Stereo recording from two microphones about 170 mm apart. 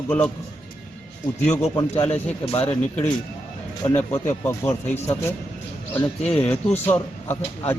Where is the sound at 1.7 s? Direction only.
20° left (ahead or behind).